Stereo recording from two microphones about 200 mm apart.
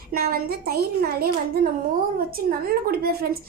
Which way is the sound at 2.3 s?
50° right (ahead or behind).